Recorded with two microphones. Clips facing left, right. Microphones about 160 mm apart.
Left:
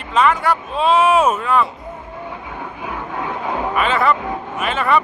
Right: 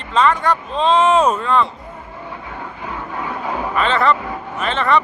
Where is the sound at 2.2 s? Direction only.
15° left (ahead or behind).